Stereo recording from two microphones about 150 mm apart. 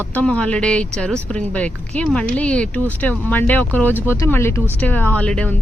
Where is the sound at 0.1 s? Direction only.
10° left (ahead or behind).